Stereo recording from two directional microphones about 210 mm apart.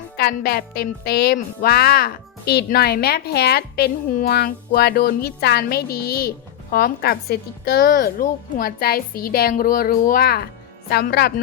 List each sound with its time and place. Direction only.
0.2 s speech: 50° left (ahead or behind)